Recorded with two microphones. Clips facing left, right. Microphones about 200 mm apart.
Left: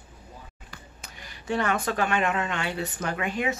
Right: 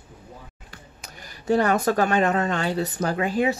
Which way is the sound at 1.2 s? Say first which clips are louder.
Right 6 dB; 40° right (ahead or behind).